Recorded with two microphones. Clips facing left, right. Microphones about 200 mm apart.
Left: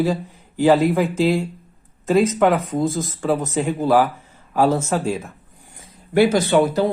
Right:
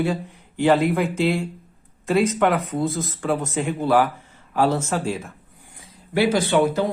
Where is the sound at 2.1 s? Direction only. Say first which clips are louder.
Left 3 dB; 40° left (ahead or behind).